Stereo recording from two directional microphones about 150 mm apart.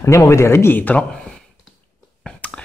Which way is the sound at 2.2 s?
5° left (ahead or behind).